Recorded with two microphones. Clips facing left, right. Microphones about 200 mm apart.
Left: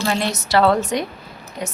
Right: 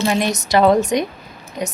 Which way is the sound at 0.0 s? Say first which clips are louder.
Right 3 dB; 15° right (ahead or behind).